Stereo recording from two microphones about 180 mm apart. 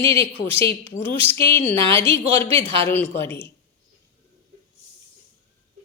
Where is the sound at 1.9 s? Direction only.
15° left (ahead or behind).